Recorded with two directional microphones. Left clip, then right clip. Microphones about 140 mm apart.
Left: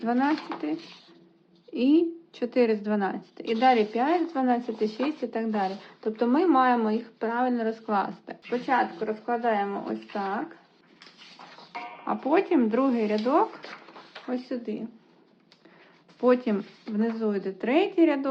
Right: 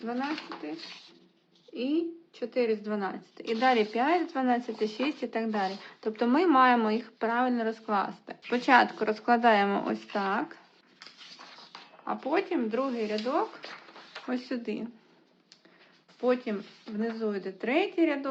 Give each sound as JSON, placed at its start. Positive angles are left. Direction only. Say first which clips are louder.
{"t": 0.0, "sound": "a woman's voice", "louder": "left 8 dB", "side_deg": 25}
{"t": 1.7, "sound": "a woman's voice", "louder": "left 8 dB", "side_deg": 25}
{"t": 2.9, "sound": "speech", "louder": "left 5 dB", "side_deg": 5}
{"t": 8.4, "sound": "speech", "louder": "right 3 dB", "side_deg": -65}
{"t": 10.2, "sound": "speech", "louder": "right 1 dB", "side_deg": -40}
{"t": 12.0, "sound": "speech", "louder": "left 5 dB", "side_deg": 5}
{"t": 14.3, "sound": "speech", "louder": "left 2 dB", "side_deg": -25}
{"t": 16.2, "sound": "speech", "louder": "left 5 dB", "side_deg": 15}